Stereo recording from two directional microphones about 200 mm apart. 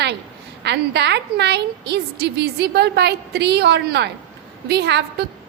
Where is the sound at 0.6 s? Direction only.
55° right (ahead or behind).